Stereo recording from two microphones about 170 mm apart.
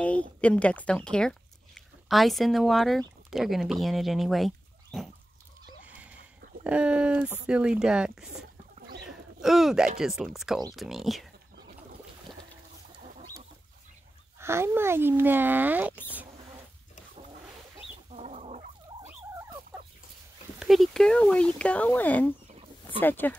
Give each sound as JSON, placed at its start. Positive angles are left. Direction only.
{"t": 0.0, "sound": "speech", "side_deg": 10}
{"t": 6.6, "sound": "speech", "side_deg": -5}
{"t": 14.4, "sound": "speech", "side_deg": -15}
{"t": 18.1, "sound": "fowl", "side_deg": -40}
{"t": 19.0, "sound": "fowl", "side_deg": -10}
{"t": 20.5, "sound": "speech", "side_deg": 0}